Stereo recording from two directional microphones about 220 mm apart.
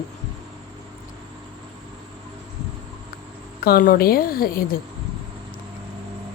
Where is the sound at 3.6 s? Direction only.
45° left (ahead or behind).